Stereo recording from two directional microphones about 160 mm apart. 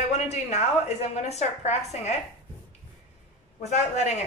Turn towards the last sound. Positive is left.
turn(degrees=45)  # may be behind; listen again after turning